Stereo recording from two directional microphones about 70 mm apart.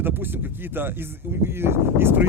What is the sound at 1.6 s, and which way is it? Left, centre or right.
Speech, right.